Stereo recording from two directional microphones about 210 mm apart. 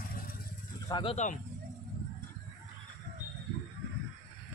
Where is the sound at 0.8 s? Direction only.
20° left (ahead or behind).